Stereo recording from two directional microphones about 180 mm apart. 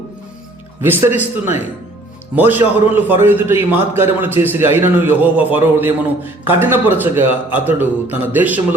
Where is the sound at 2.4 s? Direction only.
10° right (ahead or behind).